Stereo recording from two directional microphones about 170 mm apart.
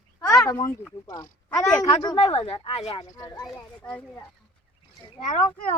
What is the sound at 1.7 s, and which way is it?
Speech, 40° left (ahead or behind).